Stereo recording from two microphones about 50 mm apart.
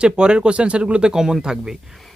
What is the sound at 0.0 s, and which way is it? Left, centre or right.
Speech, centre.